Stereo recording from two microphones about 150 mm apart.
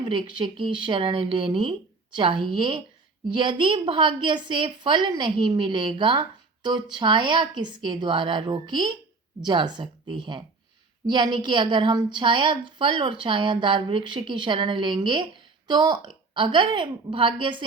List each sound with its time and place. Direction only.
0.0 s a woman's voice: 35° right (ahead or behind)